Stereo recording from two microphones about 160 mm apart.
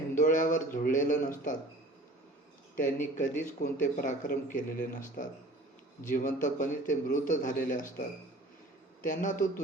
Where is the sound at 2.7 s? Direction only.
55° left (ahead or behind).